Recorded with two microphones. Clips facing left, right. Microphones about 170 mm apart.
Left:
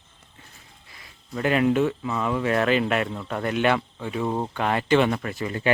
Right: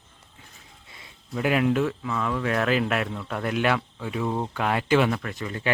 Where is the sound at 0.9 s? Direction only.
25° right (ahead or behind).